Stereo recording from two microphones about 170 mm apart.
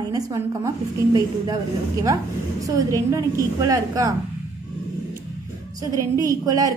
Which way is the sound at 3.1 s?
15° right (ahead or behind).